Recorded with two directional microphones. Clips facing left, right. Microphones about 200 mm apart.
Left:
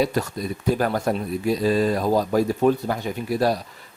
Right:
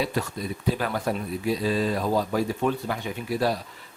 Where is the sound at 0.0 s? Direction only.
40° left (ahead or behind).